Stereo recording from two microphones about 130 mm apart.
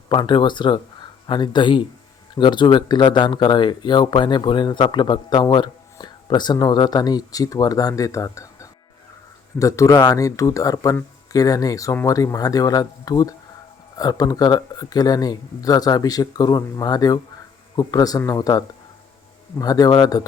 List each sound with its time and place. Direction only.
0.1 s speech: 35° left (ahead or behind)